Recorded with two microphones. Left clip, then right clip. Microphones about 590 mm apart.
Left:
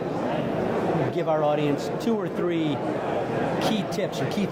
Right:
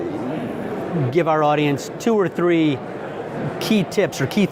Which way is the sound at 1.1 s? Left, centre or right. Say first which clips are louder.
Right 9 dB; right.